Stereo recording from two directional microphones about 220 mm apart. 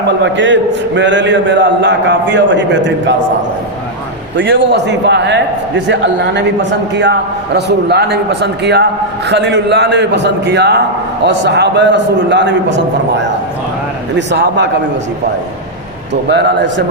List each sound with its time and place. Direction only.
0.2 s a man's voice: 55° right (ahead or behind)
4.4 s a man's voice: 55° right (ahead or behind)
16.3 s a man's voice: 50° right (ahead or behind)